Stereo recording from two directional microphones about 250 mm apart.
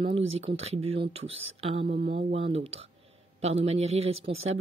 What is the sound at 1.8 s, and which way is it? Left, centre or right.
Speech, right.